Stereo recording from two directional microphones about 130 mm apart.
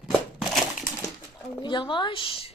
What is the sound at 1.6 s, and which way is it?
Speech, 35° left (ahead or behind).